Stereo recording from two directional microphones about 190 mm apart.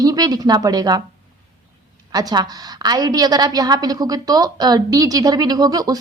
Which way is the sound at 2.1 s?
20° right (ahead or behind).